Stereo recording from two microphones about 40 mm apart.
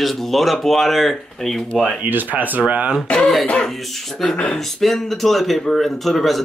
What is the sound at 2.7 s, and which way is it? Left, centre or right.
Speech, right.